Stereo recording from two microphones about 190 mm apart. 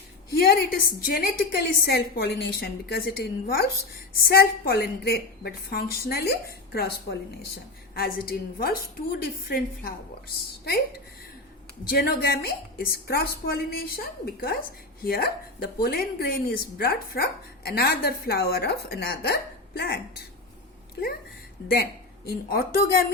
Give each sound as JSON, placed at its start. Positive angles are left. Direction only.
{"t": 0.3, "sound": "a woman's voice", "side_deg": 55}
{"t": 11.9, "sound": "a woman's voice", "side_deg": 55}
{"t": 22.3, "sound": "a woman's voice", "side_deg": 50}